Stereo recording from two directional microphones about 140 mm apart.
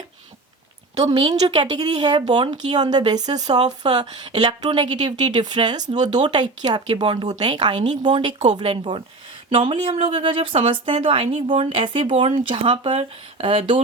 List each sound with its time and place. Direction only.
1.1 s speech: 30° right (ahead or behind)
5.8 s speech: 55° right (ahead or behind)
6.2 s speech: 30° right (ahead or behind)
8.3 s speech: 55° right (ahead or behind)
8.5 s speech: 40° right (ahead or behind)